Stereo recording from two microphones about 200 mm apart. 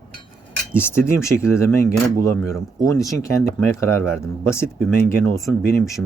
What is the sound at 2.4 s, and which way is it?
Speech, centre (ahead or behind).